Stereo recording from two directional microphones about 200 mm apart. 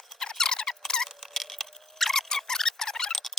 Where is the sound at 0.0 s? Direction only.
Centre (ahead or behind).